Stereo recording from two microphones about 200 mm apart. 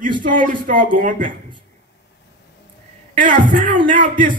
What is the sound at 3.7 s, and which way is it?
Speech, 25° right (ahead or behind).